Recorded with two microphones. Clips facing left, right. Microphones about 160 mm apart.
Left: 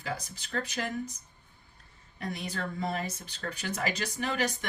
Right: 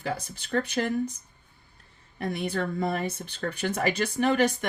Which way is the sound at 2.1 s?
55° right (ahead or behind).